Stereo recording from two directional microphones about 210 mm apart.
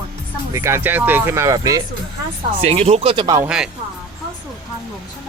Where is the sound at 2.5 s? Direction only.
30° right (ahead or behind).